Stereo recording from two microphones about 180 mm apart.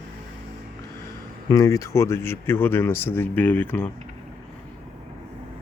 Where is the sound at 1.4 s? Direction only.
20° left (ahead or behind).